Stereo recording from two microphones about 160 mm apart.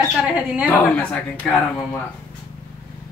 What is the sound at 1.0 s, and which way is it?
Speech, 10° left (ahead or behind).